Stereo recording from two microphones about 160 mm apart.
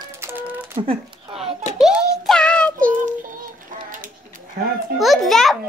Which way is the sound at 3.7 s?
55° right (ahead or behind).